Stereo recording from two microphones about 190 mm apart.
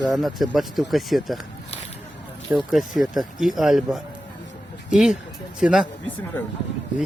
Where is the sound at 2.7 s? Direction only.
Centre (ahead or behind).